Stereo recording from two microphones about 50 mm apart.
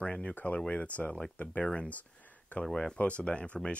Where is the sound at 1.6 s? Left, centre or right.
Left.